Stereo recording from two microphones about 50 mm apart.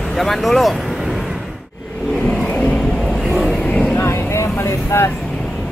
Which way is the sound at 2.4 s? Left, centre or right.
Left.